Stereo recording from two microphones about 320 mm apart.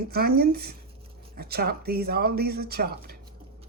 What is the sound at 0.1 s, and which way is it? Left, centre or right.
Speech, right.